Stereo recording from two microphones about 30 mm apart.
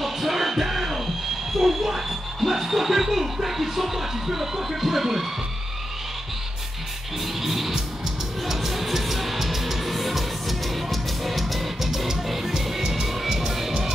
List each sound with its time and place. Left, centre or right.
0.0 s music: centre
1.6 s a sound: centre
4.7 s music: centre
7.4 s music: centre
12.8 s music: centre
13.5 s music: centre